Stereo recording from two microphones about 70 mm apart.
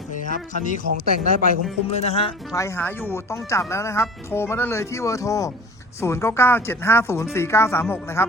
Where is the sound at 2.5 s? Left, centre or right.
Left.